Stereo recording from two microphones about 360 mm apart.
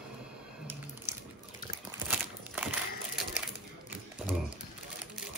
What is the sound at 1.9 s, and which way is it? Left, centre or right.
Crumpling, centre.